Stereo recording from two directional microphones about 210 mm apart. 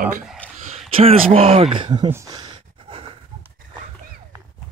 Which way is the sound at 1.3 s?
25° right (ahead or behind).